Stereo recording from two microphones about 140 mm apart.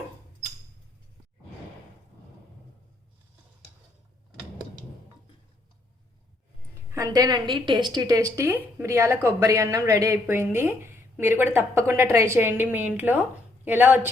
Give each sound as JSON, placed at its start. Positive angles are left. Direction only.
{"t": 6.9, "sound": "a woman's voice", "side_deg": -25}